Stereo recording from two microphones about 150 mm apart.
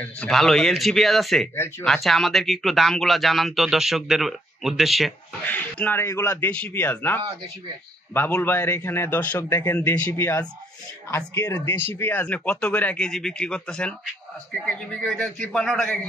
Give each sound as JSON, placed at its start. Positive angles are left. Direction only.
{"t": 0.0, "sound": "speech", "side_deg": 5}
{"t": 1.5, "sound": "speech", "side_deg": 15}
{"t": 1.9, "sound": "speech", "side_deg": 0}
{"t": 5.5, "sound": "speech", "side_deg": 10}